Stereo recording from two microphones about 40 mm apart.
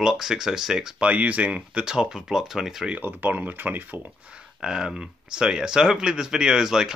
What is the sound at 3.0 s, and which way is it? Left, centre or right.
Speech, right.